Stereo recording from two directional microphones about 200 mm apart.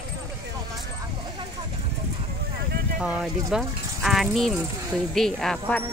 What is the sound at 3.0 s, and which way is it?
Speech, centre (ahead or behind).